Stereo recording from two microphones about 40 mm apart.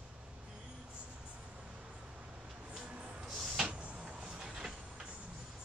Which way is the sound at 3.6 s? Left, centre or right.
Right.